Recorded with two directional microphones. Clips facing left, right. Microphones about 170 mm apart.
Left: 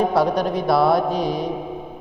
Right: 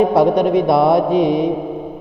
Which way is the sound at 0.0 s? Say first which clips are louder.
Right 6 dB; 25° right (ahead or behind).